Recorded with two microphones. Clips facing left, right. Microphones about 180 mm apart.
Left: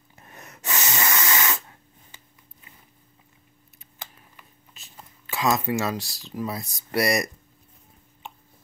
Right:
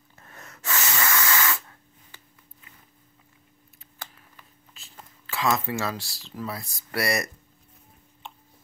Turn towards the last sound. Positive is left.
turn(degrees=15)  # may be behind; listen again after turning